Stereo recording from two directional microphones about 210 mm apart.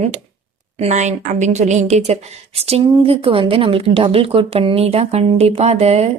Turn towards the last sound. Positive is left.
turn(degrees=-30)  # may be behind; listen again after turning